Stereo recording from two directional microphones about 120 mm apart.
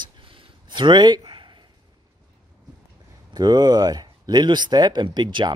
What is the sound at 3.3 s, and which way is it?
Speech, 35° right (ahead or behind).